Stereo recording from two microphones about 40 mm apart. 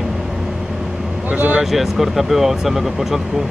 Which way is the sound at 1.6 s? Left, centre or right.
Centre.